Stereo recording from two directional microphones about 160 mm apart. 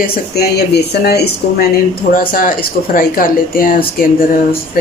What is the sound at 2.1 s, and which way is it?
Speech, 60° left (ahead or behind).